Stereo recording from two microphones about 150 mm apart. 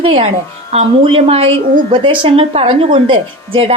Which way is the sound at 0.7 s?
40° right (ahead or behind).